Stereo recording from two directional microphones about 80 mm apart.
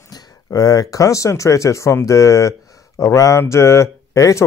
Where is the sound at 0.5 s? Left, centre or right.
Left.